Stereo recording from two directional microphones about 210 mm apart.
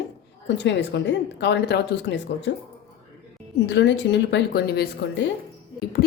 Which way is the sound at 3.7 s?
55° left (ahead or behind).